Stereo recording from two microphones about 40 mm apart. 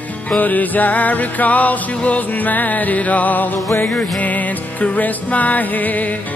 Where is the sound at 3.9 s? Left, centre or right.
Left.